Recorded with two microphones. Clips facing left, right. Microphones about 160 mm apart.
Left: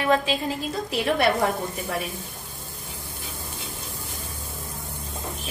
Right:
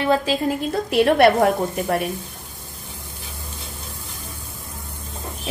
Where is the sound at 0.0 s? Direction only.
35° right (ahead or behind).